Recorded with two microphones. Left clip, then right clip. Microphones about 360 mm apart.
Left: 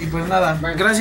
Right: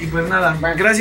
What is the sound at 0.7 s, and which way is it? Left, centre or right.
Speech, centre.